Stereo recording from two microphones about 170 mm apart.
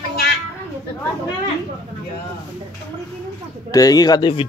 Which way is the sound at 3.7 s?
20° left (ahead or behind).